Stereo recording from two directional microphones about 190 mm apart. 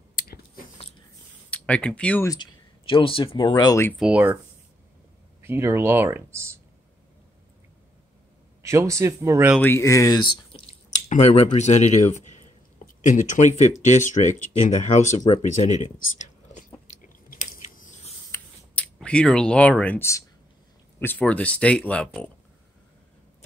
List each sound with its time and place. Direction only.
0.1 s biting: 50° left (ahead or behind)
1.5 s speech: 5° left (ahead or behind)
2.2 s speech: 25° left (ahead or behind)
4.0 s speech: 10° right (ahead or behind)
5.4 s speech: 15° right (ahead or behind)
8.6 s speech: 15° right (ahead or behind)
9.6 s speech: 10° left (ahead or behind)
10.5 s drip: 35° left (ahead or behind)
13.0 s speech: 40° left (ahead or behind)
16.9 s chewing: 40° left (ahead or behind)
18.3 s a sound: 5° left (ahead or behind)
21.2 s speech: 5° left (ahead or behind)